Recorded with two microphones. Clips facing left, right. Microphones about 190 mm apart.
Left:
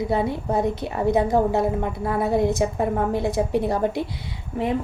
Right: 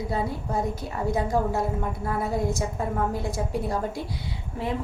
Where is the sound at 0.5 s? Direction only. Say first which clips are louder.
Left 5 dB; 70° left (ahead or behind).